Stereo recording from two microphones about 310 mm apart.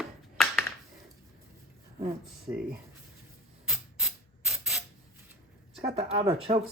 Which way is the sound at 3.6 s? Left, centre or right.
Centre.